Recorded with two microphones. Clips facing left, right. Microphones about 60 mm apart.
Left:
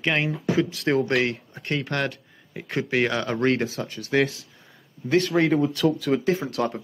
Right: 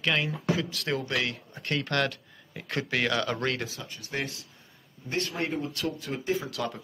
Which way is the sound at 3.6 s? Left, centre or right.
Left.